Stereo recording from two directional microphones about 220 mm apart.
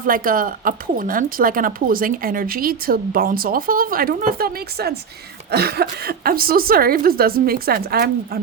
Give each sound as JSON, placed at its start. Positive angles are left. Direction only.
{"t": 0.0, "sound": "speech", "side_deg": -40}